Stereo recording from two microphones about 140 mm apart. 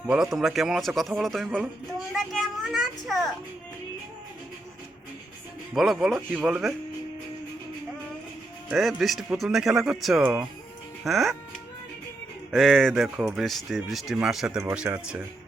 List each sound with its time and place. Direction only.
0.1 s speech: centre (ahead or behind)
5.7 s a man's voice: centre (ahead or behind)
8.7 s speech: centre (ahead or behind)
12.5 s a man's voice: centre (ahead or behind)